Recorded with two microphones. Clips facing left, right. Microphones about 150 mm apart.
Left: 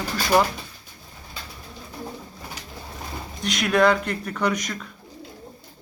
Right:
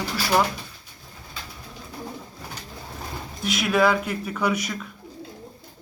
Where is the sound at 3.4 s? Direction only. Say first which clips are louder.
Left 1 dB; 5° right (ahead or behind).